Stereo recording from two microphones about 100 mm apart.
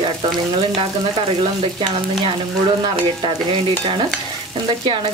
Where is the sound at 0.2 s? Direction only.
55° right (ahead or behind).